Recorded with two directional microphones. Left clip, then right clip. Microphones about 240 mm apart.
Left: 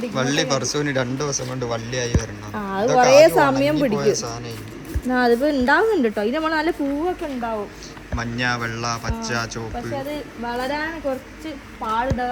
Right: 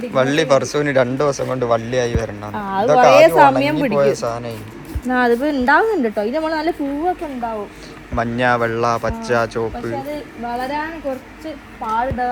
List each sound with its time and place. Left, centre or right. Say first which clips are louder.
0.1 s speech: right 8 dB; centre
2.6 s speech: right 5 dB; centre
2.8 s a woman's voice: right 4 dB; centre
3.2 s speech: right 5 dB; centre
4.2 s speech: right 7 dB; centre
5.1 s a woman's voice: right 2 dB; centre